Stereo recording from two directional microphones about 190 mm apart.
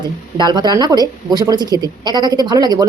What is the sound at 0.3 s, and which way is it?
Speech, 20° right (ahead or behind).